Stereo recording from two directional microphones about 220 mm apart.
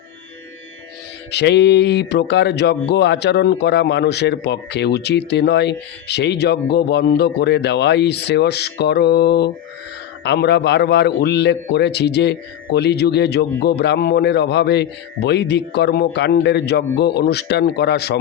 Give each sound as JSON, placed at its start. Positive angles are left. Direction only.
{"t": 1.3, "sound": "speech", "side_deg": 50}